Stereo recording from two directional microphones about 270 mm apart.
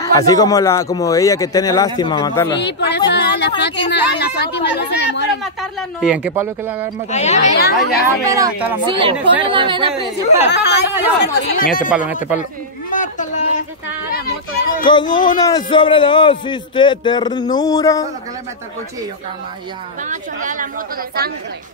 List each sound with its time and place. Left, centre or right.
0.0 s a man's voice: centre
2.5 s speech: left
3.1 s a sound: left
3.9 s speech: left
5.4 s speech: centre
7.1 s speech: left
8.3 s a woman's voice: centre
10.5 s speech: left
12.9 s a man's voice: left
15.3 s a man's voice: centre
20.0 s a woman's voice: right